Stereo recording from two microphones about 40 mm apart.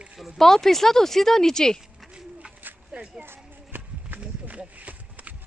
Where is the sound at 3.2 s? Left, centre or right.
Right.